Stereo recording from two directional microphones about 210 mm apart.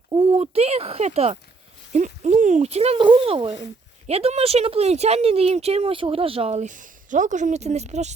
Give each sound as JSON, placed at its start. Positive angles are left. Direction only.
{"t": 0.1, "sound": "speech", "side_deg": -25}